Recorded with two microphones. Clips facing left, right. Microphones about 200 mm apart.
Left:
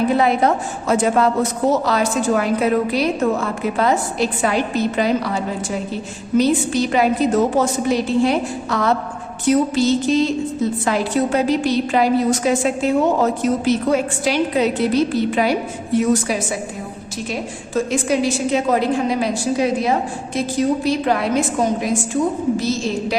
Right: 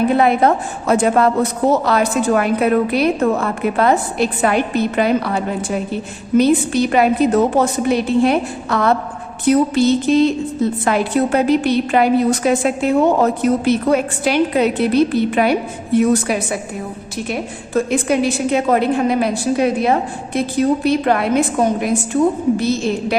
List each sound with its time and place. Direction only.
0.2 s a woman's voice: 55° right (ahead or behind)